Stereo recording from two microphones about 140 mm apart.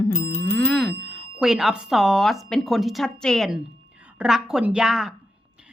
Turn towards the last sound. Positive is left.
turn(degrees=-5)  # may be behind; listen again after turning